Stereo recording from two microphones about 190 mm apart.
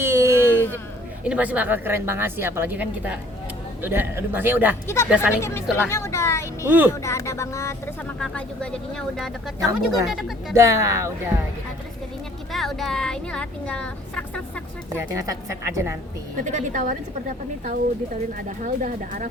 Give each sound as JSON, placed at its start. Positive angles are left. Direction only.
{"t": 0.0, "sound": "a sound", "side_deg": -15}
{"t": 1.2, "sound": "a woman's voice", "side_deg": -5}
{"t": 5.4, "sound": "speech", "side_deg": 15}
{"t": 6.7, "sound": "a woman's voice", "side_deg": -10}
{"t": 7.0, "sound": "speech", "side_deg": 15}
{"t": 10.5, "sound": "a woman's voice", "side_deg": -15}
{"t": 12.5, "sound": "speech", "side_deg": 0}
{"t": 14.9, "sound": "a woman's voice", "side_deg": -15}
{"t": 16.4, "sound": "a woman's voice", "side_deg": -40}
{"t": 18.4, "sound": "speech", "side_deg": -45}